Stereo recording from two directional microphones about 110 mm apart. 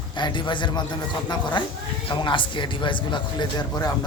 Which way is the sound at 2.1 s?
50° left (ahead or behind).